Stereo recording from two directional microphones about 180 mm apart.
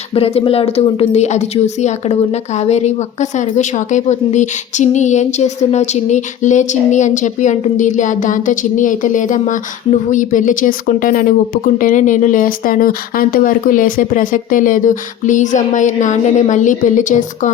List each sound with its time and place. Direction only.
0.1 s speech: 35° left (ahead or behind)